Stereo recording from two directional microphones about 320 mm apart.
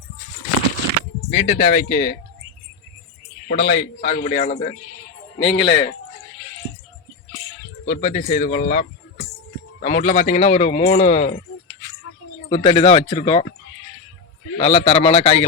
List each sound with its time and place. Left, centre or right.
1.4 s speech: left
3.5 s a man's voice: left
7.9 s a man's voice: left
12.5 s speech: centre
14.6 s a man's voice: centre